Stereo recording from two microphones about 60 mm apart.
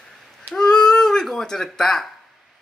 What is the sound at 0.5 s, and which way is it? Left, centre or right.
Speech, centre.